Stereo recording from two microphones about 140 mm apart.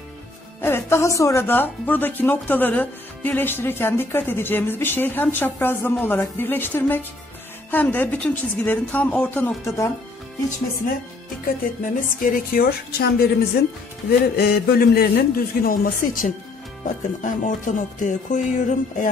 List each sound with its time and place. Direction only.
0.6 s speech: 15° left (ahead or behind)
11.4 s a woman's voice: 80° left
16.8 s music: 65° left (ahead or behind)